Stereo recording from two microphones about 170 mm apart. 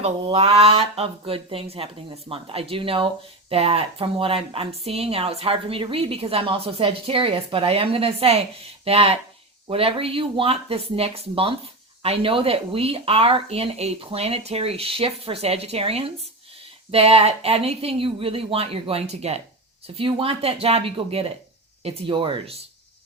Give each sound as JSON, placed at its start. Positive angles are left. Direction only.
{"t": 0.0, "sound": "a woman's voice", "side_deg": -35}